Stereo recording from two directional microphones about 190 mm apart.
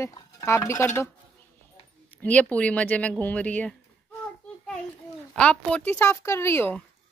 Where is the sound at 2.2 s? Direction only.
5° left (ahead or behind).